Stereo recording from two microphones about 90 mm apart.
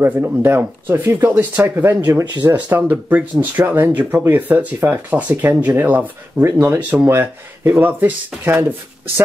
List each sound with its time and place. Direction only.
0.0 s speech: 20° right (ahead or behind)
6.8 s speech: 15° right (ahead or behind)
7.1 s speech: 25° right (ahead or behind)